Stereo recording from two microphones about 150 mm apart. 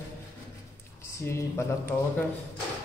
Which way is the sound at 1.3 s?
15° left (ahead or behind).